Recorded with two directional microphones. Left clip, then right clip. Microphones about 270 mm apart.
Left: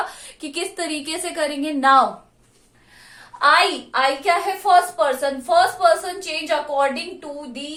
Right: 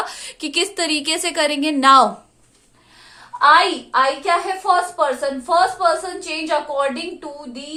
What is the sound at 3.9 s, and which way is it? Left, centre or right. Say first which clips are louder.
A woman's voice: right 3 dB; right.